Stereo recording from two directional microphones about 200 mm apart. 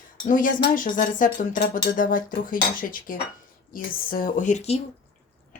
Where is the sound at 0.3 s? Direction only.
40° left (ahead or behind).